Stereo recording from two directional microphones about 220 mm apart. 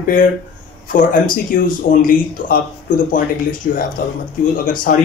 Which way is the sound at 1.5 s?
40° left (ahead or behind).